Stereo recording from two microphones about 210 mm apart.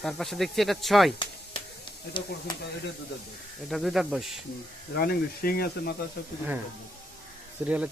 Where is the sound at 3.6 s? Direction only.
Centre (ahead or behind).